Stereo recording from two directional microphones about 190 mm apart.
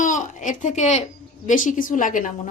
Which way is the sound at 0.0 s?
40° left (ahead or behind).